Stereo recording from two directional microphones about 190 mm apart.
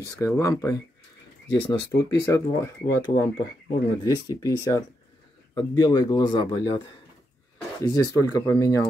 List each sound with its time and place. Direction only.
0.2 s speech: 15° left (ahead or behind)
7.9 s speech: 20° left (ahead or behind)